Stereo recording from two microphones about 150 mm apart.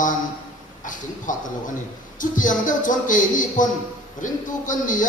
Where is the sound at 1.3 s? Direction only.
60° left (ahead or behind).